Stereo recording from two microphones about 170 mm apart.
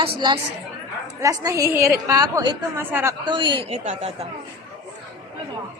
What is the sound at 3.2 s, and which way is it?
Speech, 25° right (ahead or behind).